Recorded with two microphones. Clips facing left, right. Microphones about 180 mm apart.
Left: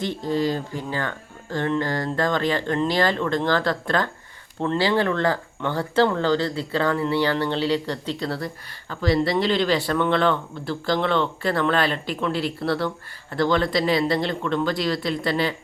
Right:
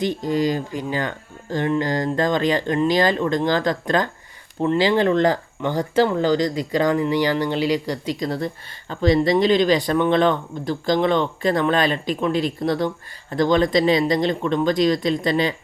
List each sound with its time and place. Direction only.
0.0 s speech: 15° right (ahead or behind)